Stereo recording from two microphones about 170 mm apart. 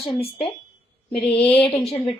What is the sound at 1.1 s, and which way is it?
Mantra, centre (ahead or behind).